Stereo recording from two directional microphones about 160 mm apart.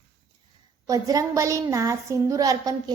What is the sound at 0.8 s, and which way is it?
A woman's voice, 20° right (ahead or behind).